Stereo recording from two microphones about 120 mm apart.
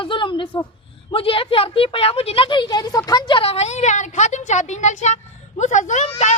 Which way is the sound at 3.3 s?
55° left (ahead or behind).